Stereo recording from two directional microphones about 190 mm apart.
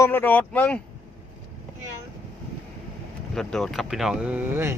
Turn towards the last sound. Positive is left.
turn(degrees=-10)  # may be behind; listen again after turning